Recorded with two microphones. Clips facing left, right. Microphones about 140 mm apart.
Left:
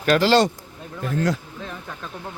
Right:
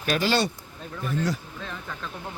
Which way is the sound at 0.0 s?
75° left (ahead or behind).